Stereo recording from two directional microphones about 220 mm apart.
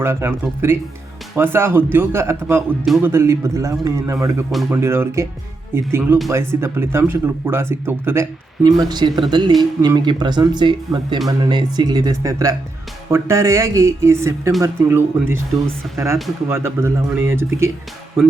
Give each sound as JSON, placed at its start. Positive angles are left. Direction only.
{"t": 0.0, "sound": "speech", "side_deg": -10}